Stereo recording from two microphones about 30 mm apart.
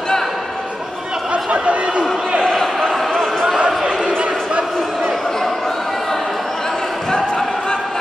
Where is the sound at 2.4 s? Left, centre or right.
Left.